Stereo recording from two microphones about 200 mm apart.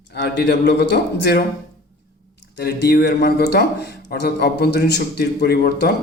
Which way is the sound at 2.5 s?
55° left (ahead or behind).